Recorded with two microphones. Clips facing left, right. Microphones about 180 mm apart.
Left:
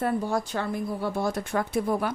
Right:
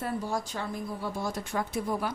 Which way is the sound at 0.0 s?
60° left (ahead or behind).